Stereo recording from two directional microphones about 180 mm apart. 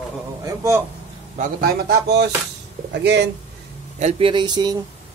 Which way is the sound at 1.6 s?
65° right (ahead or behind).